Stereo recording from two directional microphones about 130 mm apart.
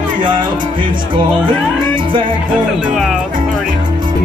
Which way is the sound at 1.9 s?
40° right (ahead or behind).